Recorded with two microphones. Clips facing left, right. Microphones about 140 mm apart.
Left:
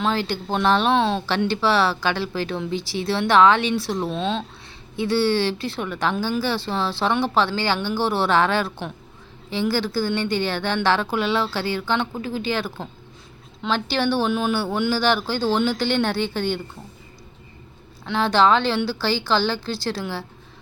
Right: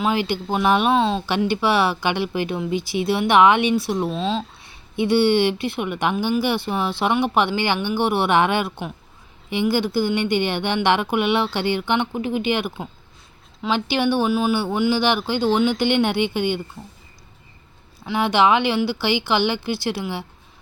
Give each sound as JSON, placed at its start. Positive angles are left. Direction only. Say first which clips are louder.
{"t": 0.0, "sound": "speech", "louder": "right 2 dB", "side_deg": -15}
{"t": 0.9, "sound": "speech", "louder": "right 1 dB", "side_deg": 0}
{"t": 1.4, "sound": "speech", "louder": "right 1 dB", "side_deg": -15}
{"t": 4.1, "sound": "speech", "louder": "right 1 dB", "side_deg": 0}
{"t": 4.9, "sound": "speech", "louder": "right 3 dB", "side_deg": -20}
{"t": 18.0, "sound": "speech", "louder": "even", "side_deg": -10}